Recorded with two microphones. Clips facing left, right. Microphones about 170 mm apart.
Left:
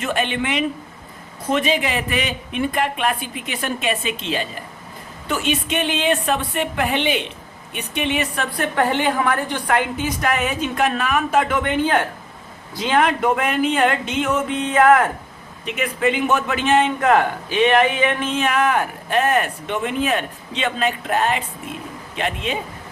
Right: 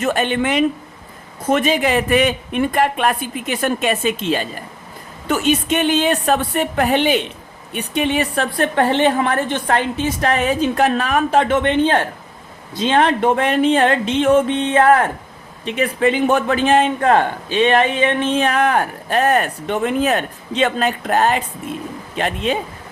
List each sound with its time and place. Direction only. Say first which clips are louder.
0.0 s a man's voice: right 4 dB; 40° right (ahead or behind)